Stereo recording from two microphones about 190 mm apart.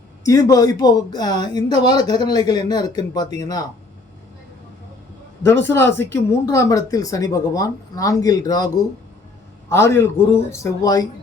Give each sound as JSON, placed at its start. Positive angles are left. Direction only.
{"t": 0.2, "sound": "speech", "side_deg": 20}
{"t": 5.4, "sound": "speech", "side_deg": 10}